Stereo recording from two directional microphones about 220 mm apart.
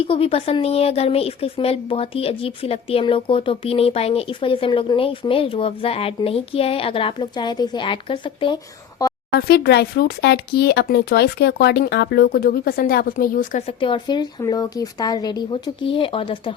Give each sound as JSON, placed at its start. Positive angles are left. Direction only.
{"t": 0.0, "sound": "speech", "side_deg": 25}
{"t": 9.3, "sound": "speech", "side_deg": 50}
{"t": 13.8, "sound": "speech", "side_deg": 20}